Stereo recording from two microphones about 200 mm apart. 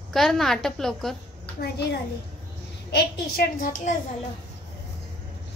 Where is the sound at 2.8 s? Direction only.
50° left (ahead or behind).